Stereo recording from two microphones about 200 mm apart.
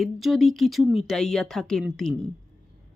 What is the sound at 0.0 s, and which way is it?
Speech, centre (ahead or behind).